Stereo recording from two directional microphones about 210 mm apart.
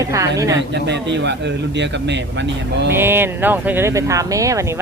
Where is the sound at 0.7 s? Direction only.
55° right (ahead or behind).